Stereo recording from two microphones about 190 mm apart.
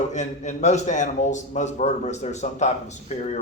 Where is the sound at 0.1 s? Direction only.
40° left (ahead or behind).